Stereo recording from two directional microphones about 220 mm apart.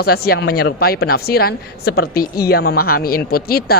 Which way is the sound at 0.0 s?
45° left (ahead or behind).